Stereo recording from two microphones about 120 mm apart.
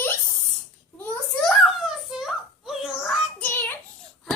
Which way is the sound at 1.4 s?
Centre (ahead or behind).